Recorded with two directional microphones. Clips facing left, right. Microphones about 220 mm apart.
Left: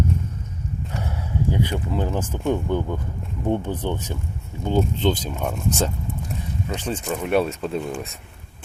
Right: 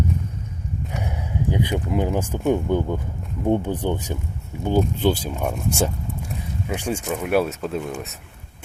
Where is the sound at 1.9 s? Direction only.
15° right (ahead or behind).